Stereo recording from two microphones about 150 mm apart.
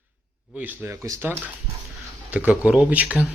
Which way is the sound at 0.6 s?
10° right (ahead or behind).